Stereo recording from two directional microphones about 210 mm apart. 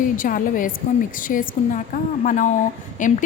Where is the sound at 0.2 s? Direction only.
40° left (ahead or behind).